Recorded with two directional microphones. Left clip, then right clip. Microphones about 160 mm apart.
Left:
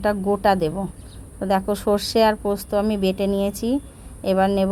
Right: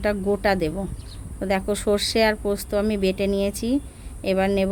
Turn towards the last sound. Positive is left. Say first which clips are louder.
# left 2 dB
turn(degrees=-5)  # may be behind; listen again after turning